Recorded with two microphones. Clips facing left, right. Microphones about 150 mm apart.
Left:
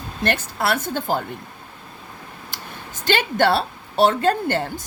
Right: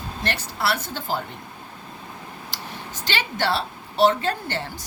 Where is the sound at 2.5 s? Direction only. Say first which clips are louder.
Right 1 dB; 55° left (ahead or behind).